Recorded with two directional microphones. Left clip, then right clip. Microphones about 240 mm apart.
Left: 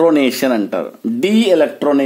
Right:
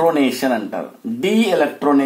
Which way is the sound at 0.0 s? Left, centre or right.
Left.